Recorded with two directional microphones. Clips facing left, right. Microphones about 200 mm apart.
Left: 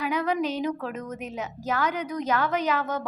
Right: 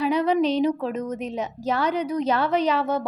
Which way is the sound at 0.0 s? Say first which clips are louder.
Right 5 dB; 30° right (ahead or behind).